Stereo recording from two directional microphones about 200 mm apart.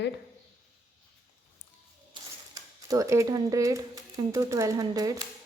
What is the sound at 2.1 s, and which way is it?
Speech, 20° right (ahead or behind).